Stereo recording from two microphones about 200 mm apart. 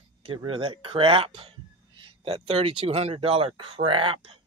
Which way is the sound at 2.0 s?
25° right (ahead or behind).